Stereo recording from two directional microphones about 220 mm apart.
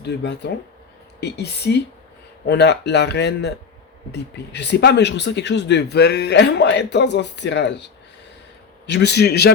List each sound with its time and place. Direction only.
0.0 s speech: 50° left (ahead or behind)
8.9 s speech: 50° left (ahead or behind)